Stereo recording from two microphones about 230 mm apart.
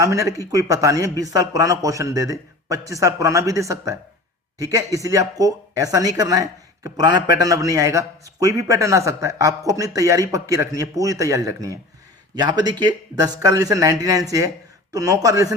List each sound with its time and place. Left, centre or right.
0.0 s speech: centre